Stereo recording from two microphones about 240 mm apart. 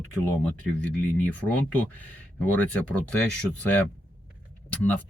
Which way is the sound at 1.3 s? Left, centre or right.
Centre.